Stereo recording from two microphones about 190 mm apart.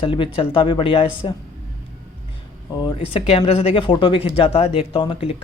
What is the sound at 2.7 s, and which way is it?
Speech, 25° left (ahead or behind).